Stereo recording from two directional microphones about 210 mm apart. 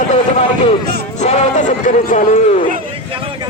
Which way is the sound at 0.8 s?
50° right (ahead or behind).